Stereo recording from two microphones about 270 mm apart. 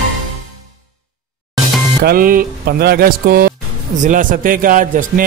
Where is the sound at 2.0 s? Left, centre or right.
Right.